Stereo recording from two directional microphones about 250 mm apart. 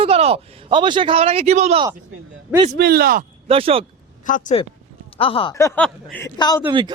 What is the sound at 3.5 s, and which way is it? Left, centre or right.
Speech, right.